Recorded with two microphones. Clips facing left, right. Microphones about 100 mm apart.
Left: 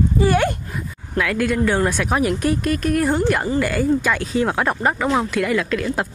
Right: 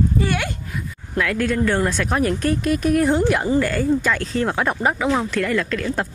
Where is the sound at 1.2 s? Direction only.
5° left (ahead or behind).